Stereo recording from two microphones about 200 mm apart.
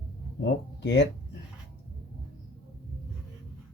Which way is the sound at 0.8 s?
60° left (ahead or behind).